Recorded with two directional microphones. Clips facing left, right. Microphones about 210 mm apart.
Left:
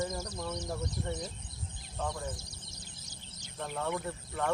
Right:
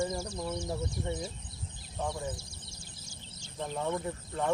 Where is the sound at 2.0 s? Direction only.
15° right (ahead or behind).